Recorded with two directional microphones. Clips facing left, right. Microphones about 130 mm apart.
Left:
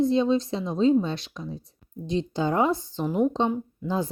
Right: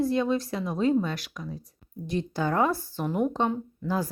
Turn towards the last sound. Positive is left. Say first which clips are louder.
# left 1 dB
turn(degrees=20)  # may be behind; listen again after turning